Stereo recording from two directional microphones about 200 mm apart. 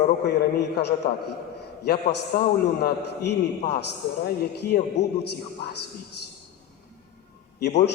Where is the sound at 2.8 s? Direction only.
55° left (ahead or behind).